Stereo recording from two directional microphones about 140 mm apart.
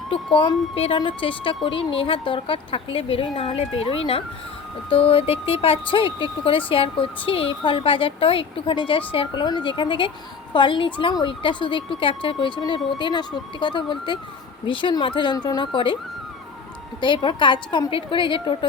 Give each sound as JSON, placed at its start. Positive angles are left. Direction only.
{"t": 0.3, "sound": "a woman's voice", "side_deg": 40}
{"t": 17.0, "sound": "a woman's voice", "side_deg": 35}